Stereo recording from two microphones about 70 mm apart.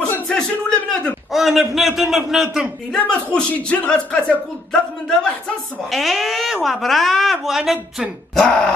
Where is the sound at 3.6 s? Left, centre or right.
Centre.